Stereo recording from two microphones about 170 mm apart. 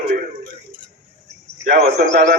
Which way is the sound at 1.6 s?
70° right (ahead or behind).